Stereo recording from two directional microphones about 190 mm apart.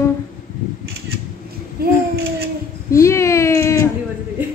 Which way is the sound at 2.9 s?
15° left (ahead or behind).